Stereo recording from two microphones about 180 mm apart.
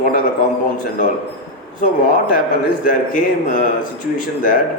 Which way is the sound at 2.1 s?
50° left (ahead or behind).